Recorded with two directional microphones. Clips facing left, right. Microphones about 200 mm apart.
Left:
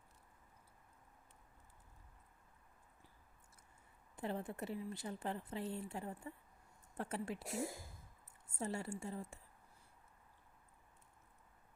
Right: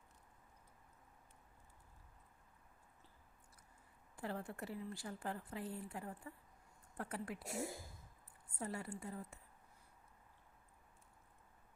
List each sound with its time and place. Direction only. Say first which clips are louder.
4.2 s speech: left 3 dB; 20° left (ahead or behind)
8.5 s speech: left 3 dB; 25° left (ahead or behind)